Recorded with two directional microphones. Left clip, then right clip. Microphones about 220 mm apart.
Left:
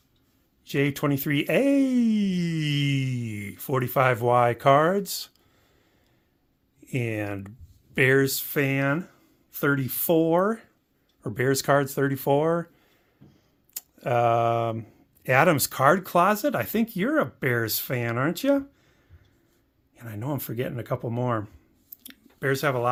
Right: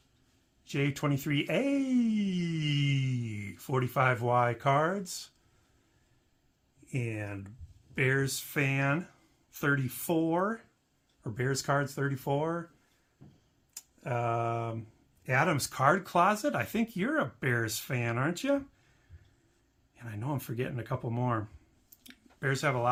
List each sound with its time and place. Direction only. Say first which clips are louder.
0.6 s speech: left 7 dB; 35° left (ahead or behind)
6.9 s speech: left 8 dB; 55° left (ahead or behind)
13.7 s speech: left 11 dB; 50° left (ahead or behind); by 18.6 s 35° left (ahead or behind)
20.0 s speech: left 5 dB; 35° left (ahead or behind)
22.0 s a sound: left 6 dB; 30° left (ahead or behind)